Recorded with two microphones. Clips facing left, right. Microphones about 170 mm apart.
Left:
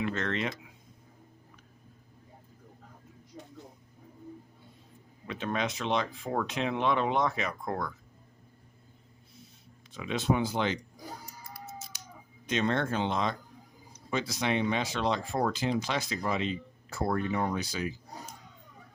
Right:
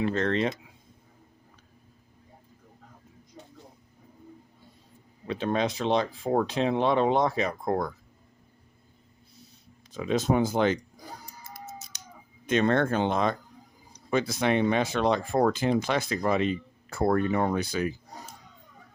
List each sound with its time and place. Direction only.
0.0 s speech: 35° right (ahead or behind)
5.3 s speech: 35° right (ahead or behind)
9.9 s speech: 40° right (ahead or behind)
11.8 s a sound: 20° right (ahead or behind)
12.5 s speech: 55° right (ahead or behind)